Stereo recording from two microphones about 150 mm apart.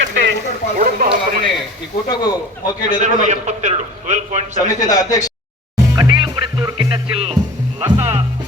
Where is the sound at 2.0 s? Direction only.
25° left (ahead or behind).